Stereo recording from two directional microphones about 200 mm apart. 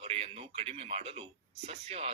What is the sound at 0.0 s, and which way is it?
A man's voice, 30° right (ahead or behind).